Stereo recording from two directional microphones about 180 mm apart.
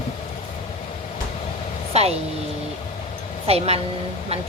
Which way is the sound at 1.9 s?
35° right (ahead or behind).